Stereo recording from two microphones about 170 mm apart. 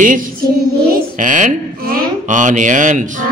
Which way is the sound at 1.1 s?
50° right (ahead or behind).